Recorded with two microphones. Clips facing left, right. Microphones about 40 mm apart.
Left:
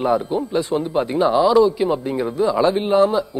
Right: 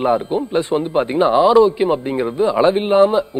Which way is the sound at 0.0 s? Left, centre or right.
Right.